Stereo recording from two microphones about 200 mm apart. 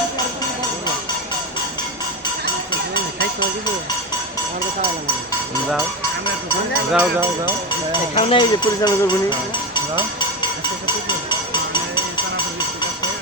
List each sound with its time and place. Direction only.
6.9 s speech: 10° right (ahead or behind)
8.1 s speech: 30° left (ahead or behind)
10.2 s music: 20° left (ahead or behind)